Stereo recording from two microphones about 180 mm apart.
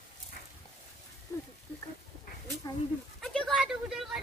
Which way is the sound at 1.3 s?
15° left (ahead or behind).